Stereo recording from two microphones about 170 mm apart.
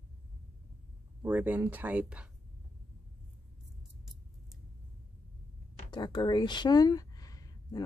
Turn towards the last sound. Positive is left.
turn(degrees=20)  # may be behind; listen again after turning